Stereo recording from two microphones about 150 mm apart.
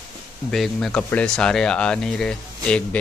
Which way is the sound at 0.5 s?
5° left (ahead or behind).